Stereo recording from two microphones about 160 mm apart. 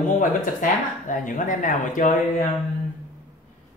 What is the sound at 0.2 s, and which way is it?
Speech, 55° left (ahead or behind).